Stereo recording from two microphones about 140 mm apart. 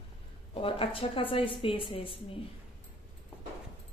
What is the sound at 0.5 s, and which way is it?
A woman's voice, 40° left (ahead or behind).